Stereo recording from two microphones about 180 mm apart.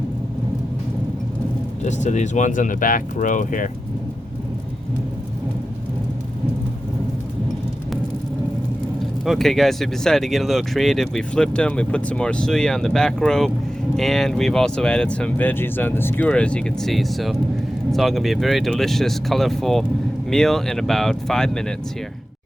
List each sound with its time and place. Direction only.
1.8 s speech: 40° left (ahead or behind)
9.2 s speech: centre (ahead or behind)